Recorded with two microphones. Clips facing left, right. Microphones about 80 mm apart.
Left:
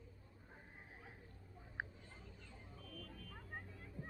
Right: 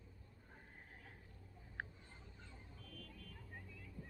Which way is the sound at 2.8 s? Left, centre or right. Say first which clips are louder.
Left 3 dB; centre.